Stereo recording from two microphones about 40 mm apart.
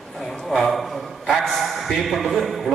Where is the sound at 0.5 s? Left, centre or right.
Centre.